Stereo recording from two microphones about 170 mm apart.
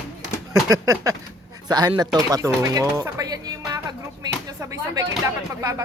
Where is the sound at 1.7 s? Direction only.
25° right (ahead or behind).